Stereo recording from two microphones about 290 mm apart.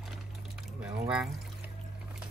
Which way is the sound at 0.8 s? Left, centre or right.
Centre.